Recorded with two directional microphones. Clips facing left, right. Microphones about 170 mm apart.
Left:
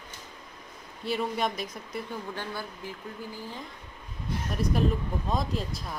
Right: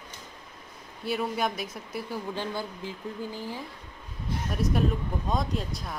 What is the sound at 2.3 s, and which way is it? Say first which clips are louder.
Speech: right 4 dB; 20° right (ahead or behind).